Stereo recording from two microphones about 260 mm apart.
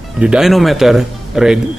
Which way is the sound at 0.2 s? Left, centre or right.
Centre.